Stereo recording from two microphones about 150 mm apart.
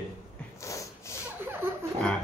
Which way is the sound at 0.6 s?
20° left (ahead or behind).